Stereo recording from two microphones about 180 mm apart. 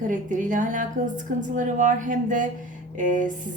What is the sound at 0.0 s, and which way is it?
A woman's voice, 45° right (ahead or behind).